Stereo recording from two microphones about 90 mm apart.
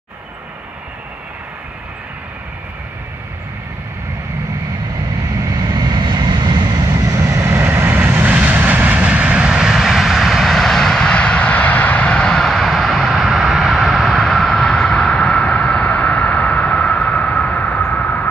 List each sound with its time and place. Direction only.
5.4 s vehicle: 45° right (ahead or behind)
7.2 s vehicle: 30° right (ahead or behind); by 18.2 s 15° left (ahead or behind)